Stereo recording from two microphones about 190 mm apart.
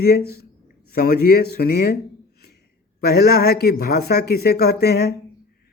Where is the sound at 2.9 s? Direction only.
55° left (ahead or behind).